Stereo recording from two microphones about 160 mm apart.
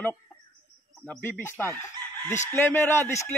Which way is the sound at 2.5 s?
15° left (ahead or behind).